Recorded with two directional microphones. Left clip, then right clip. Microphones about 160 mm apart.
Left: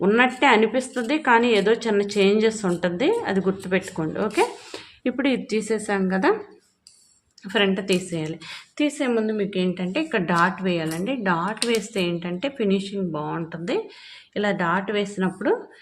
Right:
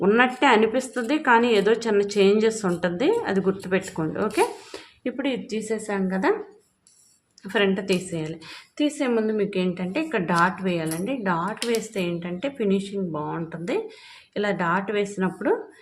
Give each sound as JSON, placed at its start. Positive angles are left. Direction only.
{"t": 0.0, "sound": "a woman's voice", "side_deg": 0}
{"t": 5.0, "sound": "a woman's voice", "side_deg": 25}
{"t": 7.4, "sound": "a woman's voice", "side_deg": 0}
{"t": 9.1, "sound": "a woman's voice", "side_deg": -5}